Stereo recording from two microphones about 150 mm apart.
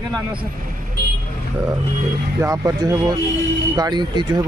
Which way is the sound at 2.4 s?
20° right (ahead or behind).